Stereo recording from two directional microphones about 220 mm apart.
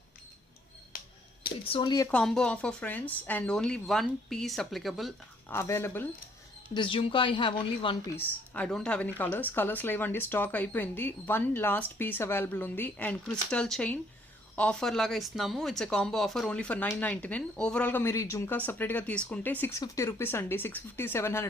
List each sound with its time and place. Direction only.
1.6 s a woman's voice: 25° left (ahead or behind)
2.0 s speech: 5° left (ahead or behind)
5.5 s speech: 10° left (ahead or behind)
6.7 s a woman's voice: 25° left (ahead or behind)
8.1 s speech: 10° left (ahead or behind)